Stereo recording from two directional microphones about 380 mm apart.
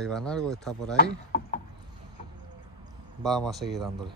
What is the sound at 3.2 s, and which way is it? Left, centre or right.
Speech, centre.